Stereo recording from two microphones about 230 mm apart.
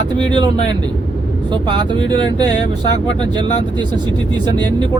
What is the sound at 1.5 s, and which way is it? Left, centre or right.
Speech, centre.